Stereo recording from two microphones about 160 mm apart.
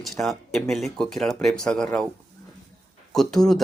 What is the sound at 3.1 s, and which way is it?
Speech, centre (ahead or behind).